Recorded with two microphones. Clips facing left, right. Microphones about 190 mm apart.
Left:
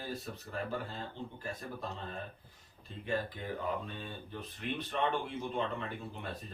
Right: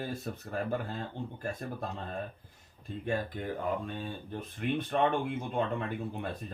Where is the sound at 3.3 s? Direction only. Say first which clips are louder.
Right 4 dB; 50° right (ahead or behind).